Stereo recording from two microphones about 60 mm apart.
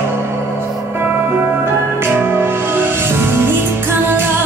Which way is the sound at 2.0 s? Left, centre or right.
Right.